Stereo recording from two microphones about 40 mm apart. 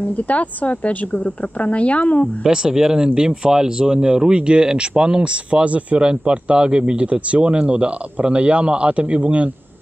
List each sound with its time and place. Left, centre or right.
0.0 s speech: left
2.4 s speech: centre